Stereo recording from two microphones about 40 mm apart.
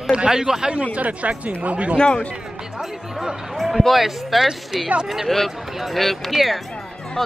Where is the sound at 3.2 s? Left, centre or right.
Centre.